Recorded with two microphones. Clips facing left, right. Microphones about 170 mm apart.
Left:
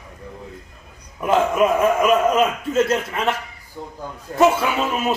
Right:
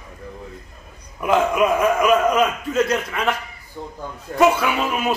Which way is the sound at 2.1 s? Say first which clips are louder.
Even; 25° left (ahead or behind).